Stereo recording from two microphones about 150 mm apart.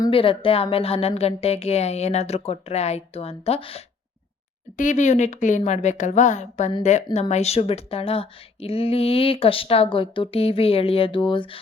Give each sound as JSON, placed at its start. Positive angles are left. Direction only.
{"t": 0.1, "sound": "speech", "side_deg": 35}
{"t": 4.8, "sound": "a woman's voice", "side_deg": 55}